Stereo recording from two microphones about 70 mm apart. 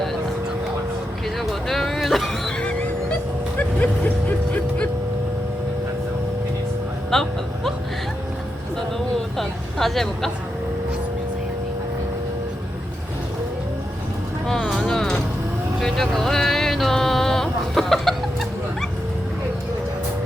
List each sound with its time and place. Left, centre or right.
1.4 s vehicle: centre
2.6 s music: centre
7.1 s music: centre
9.4 s a sound: centre
14.6 s music: centre
14.8 s music: centre
15.8 s a sound: centre